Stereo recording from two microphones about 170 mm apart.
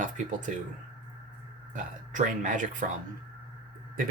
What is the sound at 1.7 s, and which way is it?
Speech, 50° right (ahead or behind).